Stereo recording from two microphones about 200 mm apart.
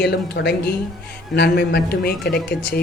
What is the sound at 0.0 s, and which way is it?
A woman's voice, 55° left (ahead or behind).